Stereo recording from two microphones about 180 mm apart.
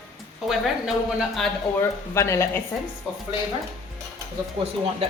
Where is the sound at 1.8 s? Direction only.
15° left (ahead or behind).